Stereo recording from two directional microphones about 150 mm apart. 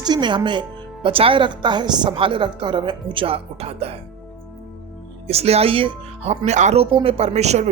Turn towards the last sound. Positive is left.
turn(degrees=-45)  # may be behind; listen again after turning